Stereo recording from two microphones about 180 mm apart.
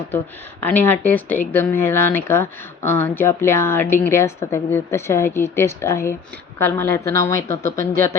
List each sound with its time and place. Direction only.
0.6 s speech: 10° left (ahead or behind)